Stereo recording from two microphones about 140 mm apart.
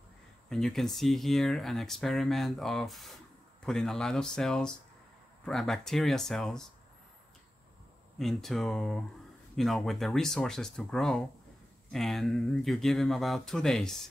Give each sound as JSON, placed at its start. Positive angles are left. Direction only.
{"t": 0.5, "sound": "speech", "side_deg": 0}
{"t": 8.2, "sound": "speech", "side_deg": 0}